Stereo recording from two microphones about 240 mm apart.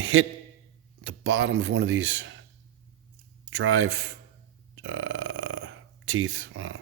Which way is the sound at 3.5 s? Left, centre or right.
Right.